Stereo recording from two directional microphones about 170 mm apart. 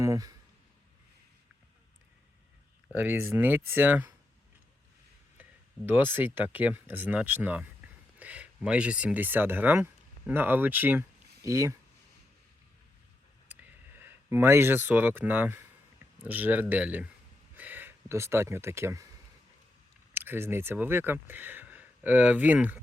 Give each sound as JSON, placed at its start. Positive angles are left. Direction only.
{"t": 0.0, "sound": "speech", "side_deg": -20}
{"t": 2.9, "sound": "speech", "side_deg": -10}
{"t": 5.4, "sound": "speech", "side_deg": -10}
{"t": 13.5, "sound": "speech", "side_deg": -10}
{"t": 17.5, "sound": "a sound", "side_deg": -10}
{"t": 20.1, "sound": "speech", "side_deg": -15}